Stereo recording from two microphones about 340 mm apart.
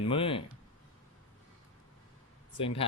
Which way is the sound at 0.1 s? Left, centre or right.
Centre.